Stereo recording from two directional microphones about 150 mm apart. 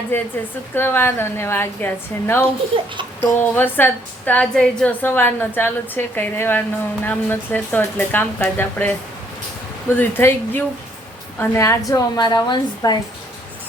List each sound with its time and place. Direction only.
0.1 s a woman's voice: 15° left (ahead or behind)